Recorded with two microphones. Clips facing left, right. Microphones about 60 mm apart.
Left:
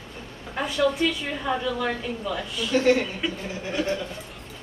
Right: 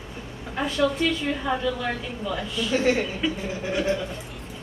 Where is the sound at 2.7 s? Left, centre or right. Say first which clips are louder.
Left 2 dB; centre.